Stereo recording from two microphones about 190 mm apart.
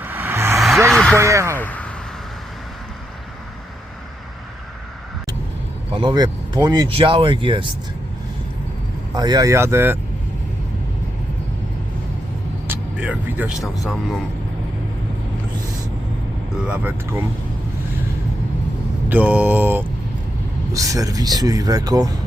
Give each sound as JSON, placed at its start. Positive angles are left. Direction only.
{"t": 0.0, "sound": "vehicle", "side_deg": -10}
{"t": 0.9, "sound": "a sound", "side_deg": 5}
{"t": 1.2, "sound": "speech", "side_deg": -15}
{"t": 1.5, "sound": "a sound", "side_deg": 10}
{"t": 5.9, "sound": "speech", "side_deg": -25}
{"t": 9.1, "sound": "speech", "side_deg": -20}
{"t": 12.6, "sound": "speech", "side_deg": -10}
{"t": 16.6, "sound": "speech", "side_deg": -10}
{"t": 19.0, "sound": "speech", "side_deg": -10}